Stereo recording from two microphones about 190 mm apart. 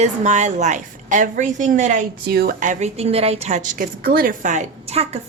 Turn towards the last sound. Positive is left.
turn(degrees=-35)  # may be behind; listen again after turning